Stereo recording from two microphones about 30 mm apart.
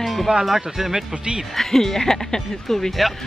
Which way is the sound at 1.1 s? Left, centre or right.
Right.